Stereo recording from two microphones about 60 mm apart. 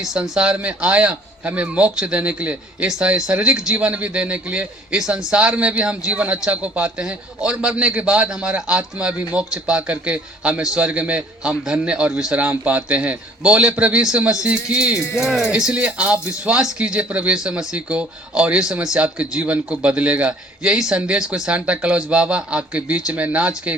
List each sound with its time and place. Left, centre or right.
0.0 s a man's voice: centre
14.0 s a man's voice: centre
15.2 s a man's voice: centre
20.7 s a man's voice: centre